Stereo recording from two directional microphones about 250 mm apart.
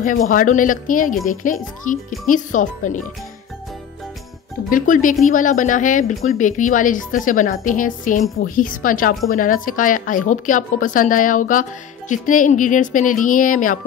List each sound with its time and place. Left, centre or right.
0.0 s speech: left
4.6 s speech: left